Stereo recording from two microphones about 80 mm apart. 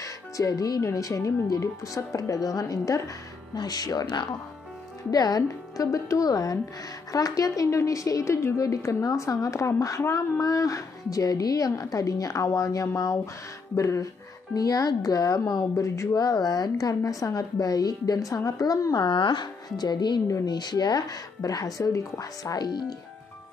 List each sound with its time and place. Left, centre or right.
0.0 s speech: left
14.5 s speech: left
18.9 s speech: left